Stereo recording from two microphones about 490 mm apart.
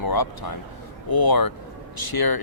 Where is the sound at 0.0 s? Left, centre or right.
Left.